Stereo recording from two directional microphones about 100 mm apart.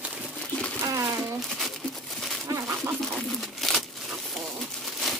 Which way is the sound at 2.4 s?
30° right (ahead or behind).